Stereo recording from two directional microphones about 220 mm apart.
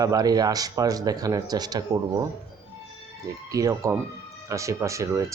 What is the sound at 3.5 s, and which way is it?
Speech, 15° right (ahead or behind).